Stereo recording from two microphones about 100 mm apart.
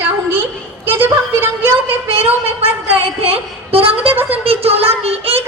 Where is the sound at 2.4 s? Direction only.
75° right (ahead or behind).